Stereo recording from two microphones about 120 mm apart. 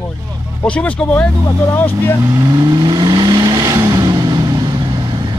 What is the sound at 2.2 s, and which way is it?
Vehicle, 30° right (ahead or behind).